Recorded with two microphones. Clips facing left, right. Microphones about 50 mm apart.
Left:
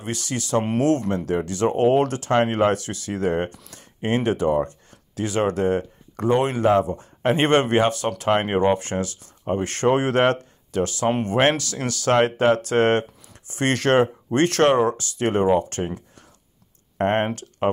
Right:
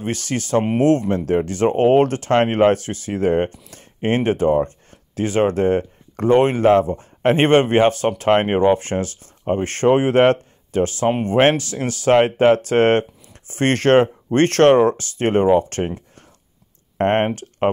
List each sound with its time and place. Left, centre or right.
0.0 s speech: right